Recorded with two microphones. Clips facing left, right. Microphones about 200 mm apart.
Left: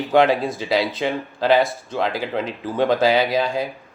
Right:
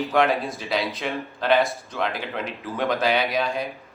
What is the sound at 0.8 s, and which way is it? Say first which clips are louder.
Speech: left 5 dB; centre (ahead or behind).